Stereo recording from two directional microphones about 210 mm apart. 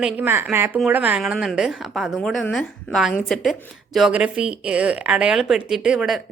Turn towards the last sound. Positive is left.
turn(degrees=-5)  # may be behind; listen again after turning